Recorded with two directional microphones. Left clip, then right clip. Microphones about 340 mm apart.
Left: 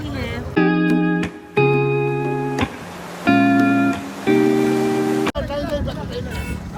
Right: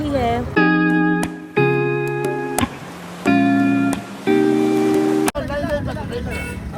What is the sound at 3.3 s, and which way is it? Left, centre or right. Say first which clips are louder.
Music: left 1 dB; centre.